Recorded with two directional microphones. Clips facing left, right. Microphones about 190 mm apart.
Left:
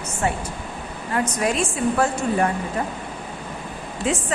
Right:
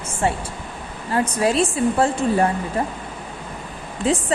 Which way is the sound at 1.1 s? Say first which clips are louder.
Right 3 dB; 30° right (ahead or behind).